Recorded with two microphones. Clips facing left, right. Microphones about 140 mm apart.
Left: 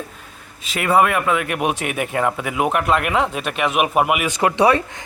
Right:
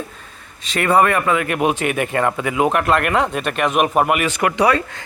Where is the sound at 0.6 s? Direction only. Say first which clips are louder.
Right 1 dB; 5° left (ahead or behind).